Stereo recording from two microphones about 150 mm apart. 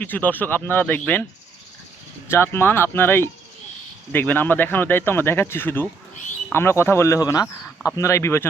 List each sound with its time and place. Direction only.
0.0 s speech: 10° left (ahead or behind)
2.2 s speech: 15° left (ahead or behind)